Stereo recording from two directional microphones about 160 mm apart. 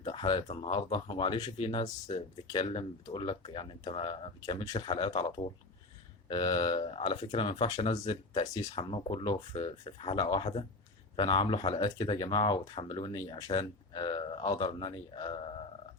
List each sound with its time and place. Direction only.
0.0 s speech: 35° left (ahead or behind)
6.2 s speech: 30° left (ahead or behind)